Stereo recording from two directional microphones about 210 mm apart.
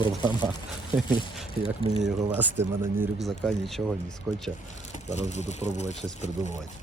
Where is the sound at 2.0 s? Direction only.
10° right (ahead or behind).